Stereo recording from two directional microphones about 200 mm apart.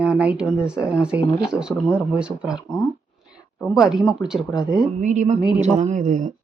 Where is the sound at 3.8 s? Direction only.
Centre (ahead or behind).